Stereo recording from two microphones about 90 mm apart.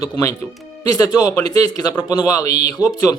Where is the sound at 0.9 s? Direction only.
45° left (ahead or behind).